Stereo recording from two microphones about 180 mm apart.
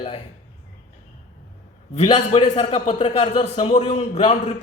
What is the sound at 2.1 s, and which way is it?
Speech, 35° left (ahead or behind).